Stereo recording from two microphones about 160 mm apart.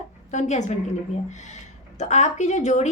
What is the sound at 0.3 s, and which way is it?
A woman's voice, 45° left (ahead or behind).